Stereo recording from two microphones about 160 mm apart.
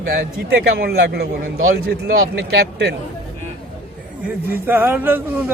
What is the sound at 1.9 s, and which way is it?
Speech, 70° right (ahead or behind).